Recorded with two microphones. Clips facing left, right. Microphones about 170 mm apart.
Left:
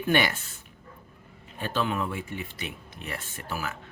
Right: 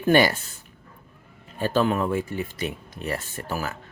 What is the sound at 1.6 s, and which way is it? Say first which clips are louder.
Speech: right 6 dB; 40° right (ahead or behind).